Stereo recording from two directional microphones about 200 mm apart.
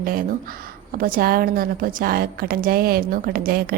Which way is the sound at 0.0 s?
45° right (ahead or behind).